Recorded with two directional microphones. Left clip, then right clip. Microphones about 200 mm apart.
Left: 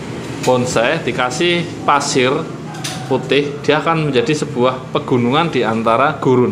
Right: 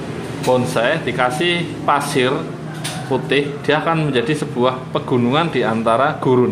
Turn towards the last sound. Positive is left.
turn(degrees=10)  # may be behind; listen again after turning